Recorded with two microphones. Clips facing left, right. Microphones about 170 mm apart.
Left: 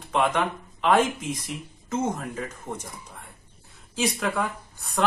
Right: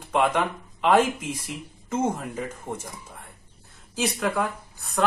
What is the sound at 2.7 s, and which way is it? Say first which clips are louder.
Speech: right 1 dB; 30° right (ahead or behind).